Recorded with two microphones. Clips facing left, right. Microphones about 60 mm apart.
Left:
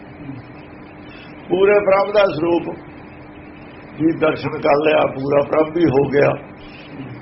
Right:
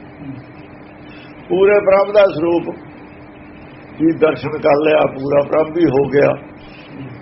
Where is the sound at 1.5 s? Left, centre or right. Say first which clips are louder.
Right 2 dB; centre.